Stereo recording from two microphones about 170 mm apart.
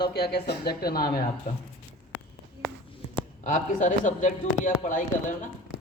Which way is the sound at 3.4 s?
45° left (ahead or behind).